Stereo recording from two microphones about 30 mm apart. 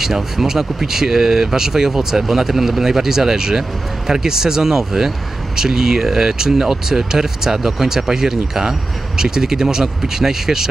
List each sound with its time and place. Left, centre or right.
0.0 s speech: centre